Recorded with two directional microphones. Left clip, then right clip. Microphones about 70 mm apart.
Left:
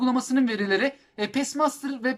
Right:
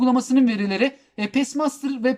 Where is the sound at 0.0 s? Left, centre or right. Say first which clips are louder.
Right 5 dB; right.